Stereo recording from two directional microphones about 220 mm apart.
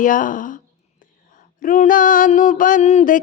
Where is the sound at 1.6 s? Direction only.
35° left (ahead or behind).